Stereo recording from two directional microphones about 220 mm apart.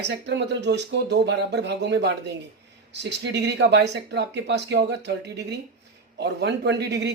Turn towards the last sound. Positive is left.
turn(degrees=-50)  # may be behind; listen again after turning